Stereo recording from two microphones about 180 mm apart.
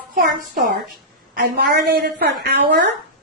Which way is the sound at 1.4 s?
60° right (ahead or behind).